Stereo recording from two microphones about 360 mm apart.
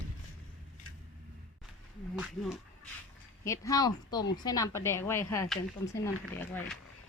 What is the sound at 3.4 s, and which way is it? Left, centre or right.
Speech, centre.